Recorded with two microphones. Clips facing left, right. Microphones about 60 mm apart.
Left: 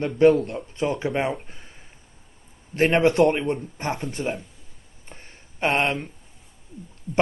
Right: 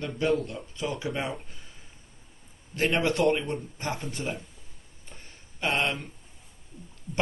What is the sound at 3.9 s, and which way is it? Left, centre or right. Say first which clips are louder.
Speech: left 6 dB; left.